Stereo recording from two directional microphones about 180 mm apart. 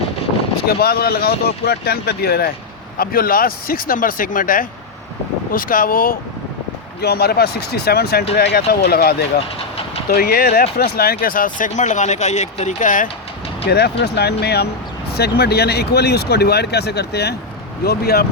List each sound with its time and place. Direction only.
0.7 s speech: 60° left (ahead or behind)
7.0 s speech: 60° left (ahead or behind); by 13.1 s 45° left (ahead or behind)
13.7 s speech: 60° left (ahead or behind)